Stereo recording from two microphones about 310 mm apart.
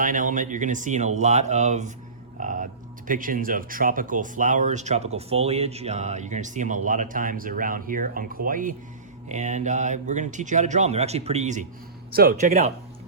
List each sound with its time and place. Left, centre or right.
0.0 s speech: right
2.4 s music: right
3.1 s speech: right